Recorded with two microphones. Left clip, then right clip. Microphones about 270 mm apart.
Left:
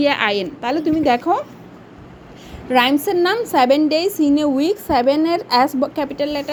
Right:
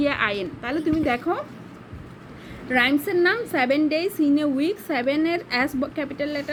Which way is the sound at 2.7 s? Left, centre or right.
Centre.